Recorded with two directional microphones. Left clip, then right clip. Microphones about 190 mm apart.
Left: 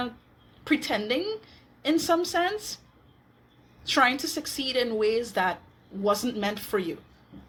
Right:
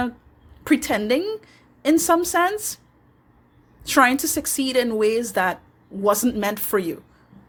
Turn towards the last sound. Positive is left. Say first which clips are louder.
# right 6 dB
turn(degrees=-50)  # may be behind; listen again after turning